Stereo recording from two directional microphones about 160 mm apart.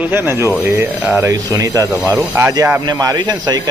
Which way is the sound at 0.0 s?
15° right (ahead or behind).